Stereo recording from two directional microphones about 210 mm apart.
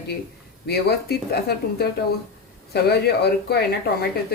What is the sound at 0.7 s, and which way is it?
Speech, 50° left (ahead or behind).